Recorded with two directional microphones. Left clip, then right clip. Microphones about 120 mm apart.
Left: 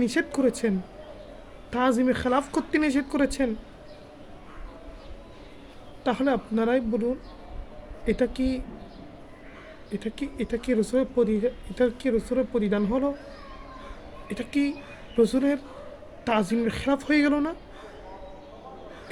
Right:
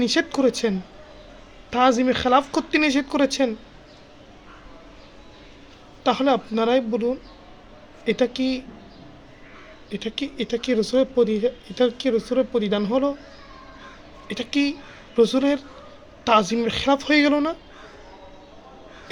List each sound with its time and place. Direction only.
0.0 s a man's voice: 20° left (ahead or behind)
1.7 s a man's voice: 25° left (ahead or behind)
6.1 s a man's voice: 20° left (ahead or behind)
9.9 s speech: 5° left (ahead or behind)
10.7 s a man's voice: 25° left (ahead or behind)
14.3 s a woman's voice: 20° left (ahead or behind)